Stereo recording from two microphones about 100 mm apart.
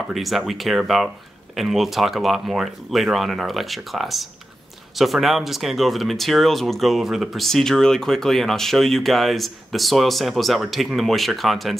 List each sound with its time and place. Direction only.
0.1 s speech: centre (ahead or behind)